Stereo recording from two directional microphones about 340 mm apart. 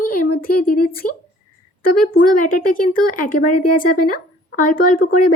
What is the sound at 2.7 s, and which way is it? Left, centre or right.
Speech, left.